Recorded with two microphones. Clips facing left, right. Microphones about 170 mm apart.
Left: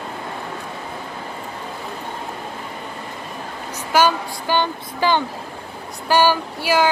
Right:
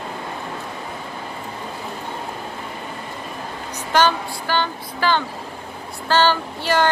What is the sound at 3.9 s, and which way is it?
Speech, 10° left (ahead or behind).